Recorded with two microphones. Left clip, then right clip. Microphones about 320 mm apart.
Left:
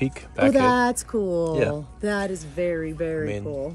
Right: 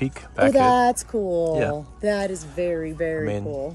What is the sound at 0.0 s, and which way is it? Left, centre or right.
Speech, centre.